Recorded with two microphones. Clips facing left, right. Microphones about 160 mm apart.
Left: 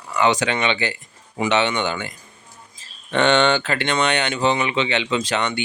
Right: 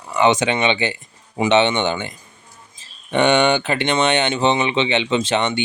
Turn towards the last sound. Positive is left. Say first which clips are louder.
# right 3 dB
turn(degrees=-20)  # may be behind; listen again after turning